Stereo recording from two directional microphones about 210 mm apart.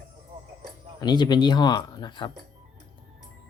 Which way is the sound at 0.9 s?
20° left (ahead or behind).